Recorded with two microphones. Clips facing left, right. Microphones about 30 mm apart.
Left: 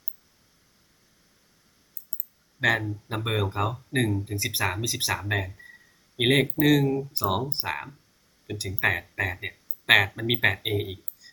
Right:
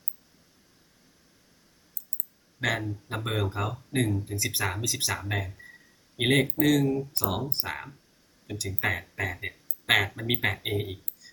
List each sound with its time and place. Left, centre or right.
2.6 s speech: centre